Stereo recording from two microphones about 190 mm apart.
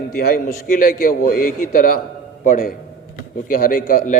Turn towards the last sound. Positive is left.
turn(degrees=45)  # may be behind; listen again after turning